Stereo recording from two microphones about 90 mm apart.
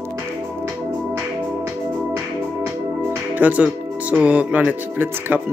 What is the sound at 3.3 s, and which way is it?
Speech, 15° right (ahead or behind).